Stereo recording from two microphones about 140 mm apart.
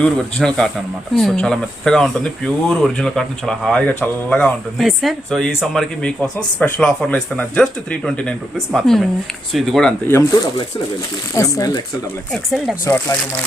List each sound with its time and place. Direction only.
0.0 s speech: 5° left (ahead or behind)
11.3 s speech: 25° left (ahead or behind)
12.3 s speech: centre (ahead or behind)
12.8 s speech: 20° left (ahead or behind)